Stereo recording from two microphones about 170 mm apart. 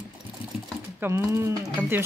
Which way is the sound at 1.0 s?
15° right (ahead or behind).